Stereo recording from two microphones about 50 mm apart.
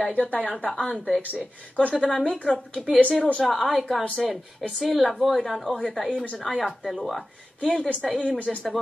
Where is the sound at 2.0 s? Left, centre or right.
Left.